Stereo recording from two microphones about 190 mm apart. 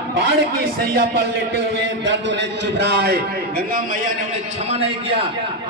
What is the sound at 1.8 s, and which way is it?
A man's voice, 65° right (ahead or behind).